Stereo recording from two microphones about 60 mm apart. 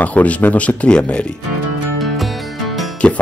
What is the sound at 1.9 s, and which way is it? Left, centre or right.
Music, centre.